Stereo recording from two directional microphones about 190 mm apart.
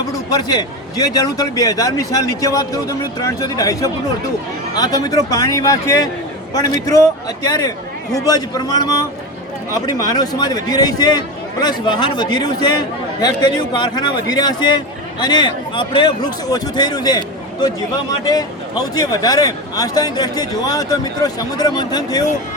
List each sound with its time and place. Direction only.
0.3 s a man's voice: 20° left (ahead or behind)